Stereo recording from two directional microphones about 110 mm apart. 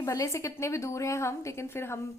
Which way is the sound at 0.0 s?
25° left (ahead or behind).